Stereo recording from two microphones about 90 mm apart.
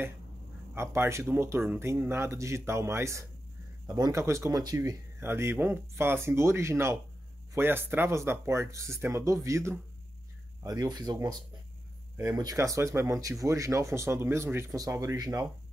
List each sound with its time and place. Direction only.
0.7 s speech: 30° right (ahead or behind)
3.8 s speech: 45° right (ahead or behind)
4.2 s speech: 30° right (ahead or behind)
4.5 s speech: 45° right (ahead or behind)
5.2 s speech: 25° right (ahead or behind); by 11.1 s 50° right (ahead or behind)
12.2 s speech: 40° right (ahead or behind)
14.8 s speech: 40° right (ahead or behind)